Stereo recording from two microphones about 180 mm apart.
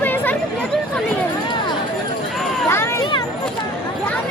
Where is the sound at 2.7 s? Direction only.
15° left (ahead or behind).